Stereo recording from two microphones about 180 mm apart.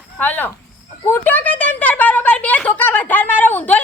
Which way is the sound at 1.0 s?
10° left (ahead or behind).